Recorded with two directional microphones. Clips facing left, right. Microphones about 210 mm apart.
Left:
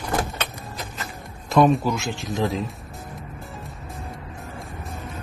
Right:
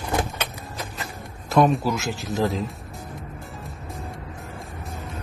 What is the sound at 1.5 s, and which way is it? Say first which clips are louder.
Speech: left 1 dB; centre (ahead or behind).